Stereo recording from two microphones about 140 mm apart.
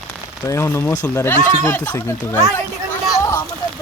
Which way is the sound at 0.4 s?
20° left (ahead or behind).